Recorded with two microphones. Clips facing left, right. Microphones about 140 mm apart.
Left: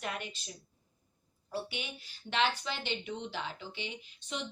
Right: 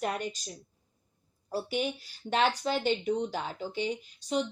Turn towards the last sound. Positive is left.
turn(degrees=-40)  # may be behind; listen again after turning